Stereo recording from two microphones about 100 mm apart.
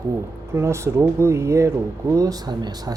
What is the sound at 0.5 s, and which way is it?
Speech, 30° right (ahead or behind).